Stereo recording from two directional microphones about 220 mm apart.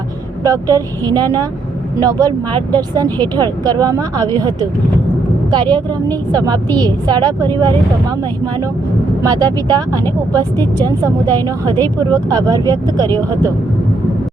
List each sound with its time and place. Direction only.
0.4 s speech: 15° right (ahead or behind)
9.2 s speech: 15° right (ahead or behind)